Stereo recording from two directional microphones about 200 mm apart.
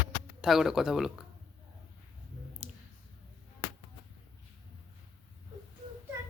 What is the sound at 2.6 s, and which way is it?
Clicking, 5° right (ahead or behind).